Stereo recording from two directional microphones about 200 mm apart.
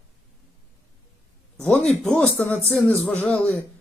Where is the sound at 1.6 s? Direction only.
5° left (ahead or behind).